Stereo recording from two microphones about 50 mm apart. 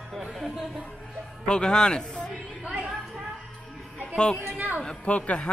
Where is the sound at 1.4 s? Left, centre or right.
Centre.